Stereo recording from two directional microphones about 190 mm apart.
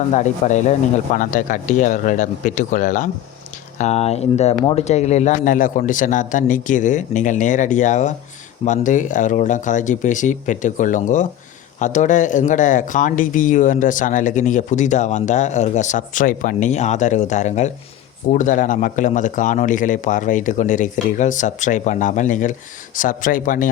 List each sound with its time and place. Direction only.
0.1 s a man's voice: 40° left (ahead or behind)